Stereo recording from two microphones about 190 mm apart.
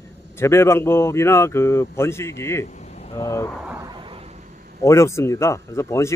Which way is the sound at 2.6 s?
40° left (ahead or behind).